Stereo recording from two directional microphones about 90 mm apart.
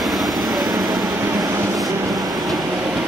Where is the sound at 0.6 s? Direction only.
50° right (ahead or behind).